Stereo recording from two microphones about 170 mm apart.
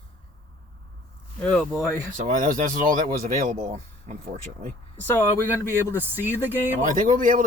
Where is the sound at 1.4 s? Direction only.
5° left (ahead or behind).